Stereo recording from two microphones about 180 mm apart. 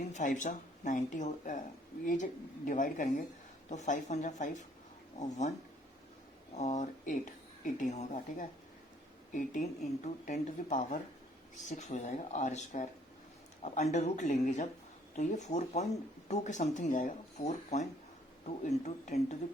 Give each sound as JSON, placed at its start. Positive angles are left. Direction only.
{"t": 0.0, "sound": "a woman's voice", "side_deg": 40}
{"t": 19.0, "sound": "speech", "side_deg": 40}